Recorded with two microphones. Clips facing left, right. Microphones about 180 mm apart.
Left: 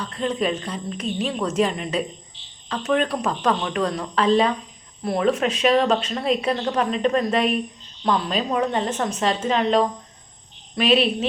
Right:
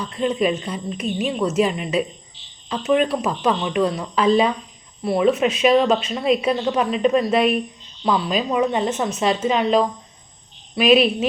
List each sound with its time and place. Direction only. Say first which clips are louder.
0.0 s speech: right 3 dB; 10° right (ahead or behind)